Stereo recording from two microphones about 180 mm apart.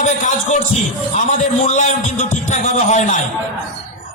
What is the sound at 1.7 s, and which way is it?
A man's voice, 40° left (ahead or behind).